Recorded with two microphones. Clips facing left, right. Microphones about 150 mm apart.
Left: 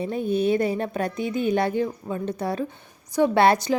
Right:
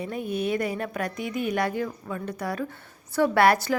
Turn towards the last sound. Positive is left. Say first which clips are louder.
# left 2 dB
turn(degrees=20)  # may be behind; listen again after turning